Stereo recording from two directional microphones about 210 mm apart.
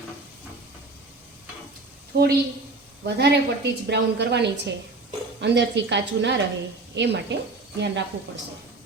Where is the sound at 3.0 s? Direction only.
50° right (ahead or behind).